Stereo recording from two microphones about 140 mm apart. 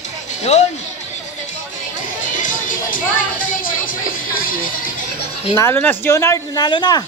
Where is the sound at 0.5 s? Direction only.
55° left (ahead or behind).